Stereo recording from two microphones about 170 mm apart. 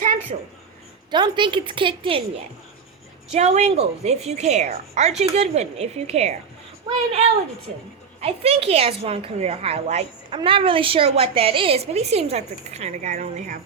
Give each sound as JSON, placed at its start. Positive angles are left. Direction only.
{"t": 0.0, "sound": "a sound", "side_deg": -45}
{"t": 1.1, "sound": "a woman's voice", "side_deg": -25}
{"t": 3.3, "sound": "a woman's voice", "side_deg": -40}
{"t": 8.2, "sound": "a woman's voice", "side_deg": -35}